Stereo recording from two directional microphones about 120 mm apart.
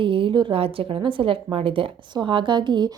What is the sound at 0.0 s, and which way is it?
A woman's voice, 45° right (ahead or behind).